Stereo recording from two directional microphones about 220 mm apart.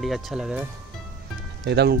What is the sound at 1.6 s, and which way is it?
Speech, 50° right (ahead or behind).